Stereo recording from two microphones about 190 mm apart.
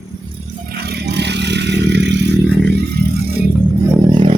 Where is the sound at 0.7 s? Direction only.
60° right (ahead or behind).